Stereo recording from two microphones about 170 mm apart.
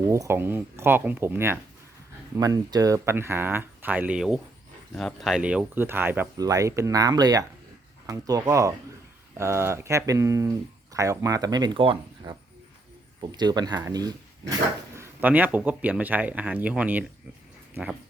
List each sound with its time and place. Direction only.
0.1 s speech: 15° right (ahead or behind)
14.9 s speech: 10° right (ahead or behind)